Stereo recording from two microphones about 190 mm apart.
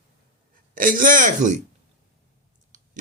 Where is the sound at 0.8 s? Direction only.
45° right (ahead or behind).